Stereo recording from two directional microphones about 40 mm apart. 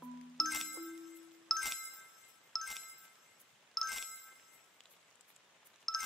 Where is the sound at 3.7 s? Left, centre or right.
Centre.